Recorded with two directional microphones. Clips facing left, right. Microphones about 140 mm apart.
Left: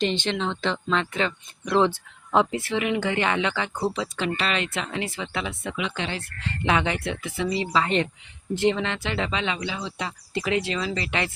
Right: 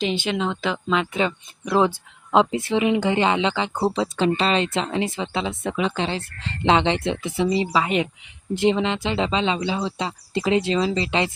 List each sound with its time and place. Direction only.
0.0 s speech: 5° right (ahead or behind)
2.3 s speech: 20° right (ahead or behind)